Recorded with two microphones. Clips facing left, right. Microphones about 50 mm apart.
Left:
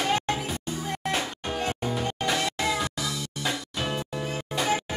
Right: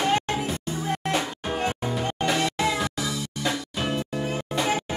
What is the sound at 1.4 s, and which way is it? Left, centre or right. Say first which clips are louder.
Music: right 3 dB; right.